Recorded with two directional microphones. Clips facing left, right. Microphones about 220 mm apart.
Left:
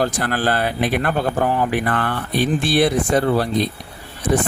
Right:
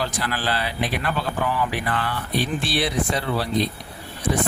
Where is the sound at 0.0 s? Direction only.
50° left (ahead or behind).